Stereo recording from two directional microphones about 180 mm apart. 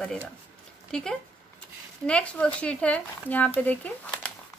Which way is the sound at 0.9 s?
5° left (ahead or behind).